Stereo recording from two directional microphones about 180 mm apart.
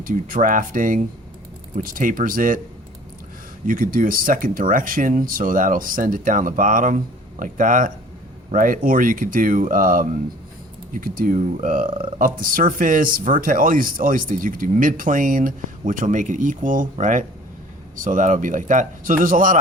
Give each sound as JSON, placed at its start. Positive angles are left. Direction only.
{"t": 0.0, "sound": "speech", "side_deg": -50}
{"t": 3.7, "sound": "speech", "side_deg": -50}